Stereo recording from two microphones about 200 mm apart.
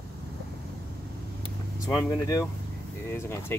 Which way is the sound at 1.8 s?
15° left (ahead or behind).